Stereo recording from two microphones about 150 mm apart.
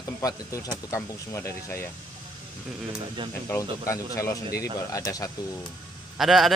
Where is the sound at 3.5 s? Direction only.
20° left (ahead or behind).